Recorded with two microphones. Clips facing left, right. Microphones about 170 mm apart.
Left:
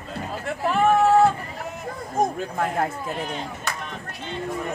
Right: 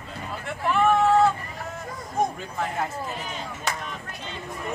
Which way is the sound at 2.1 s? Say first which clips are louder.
Left 3 dB; 50° left (ahead or behind).